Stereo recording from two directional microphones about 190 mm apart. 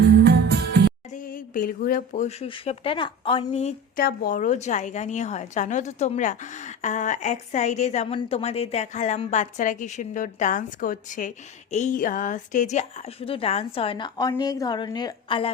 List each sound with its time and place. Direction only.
0.2 s music: 60° right (ahead or behind)
1.1 s speech: 45° left (ahead or behind)
3.9 s a woman's voice: 50° left (ahead or behind); by 15.4 s 25° left (ahead or behind)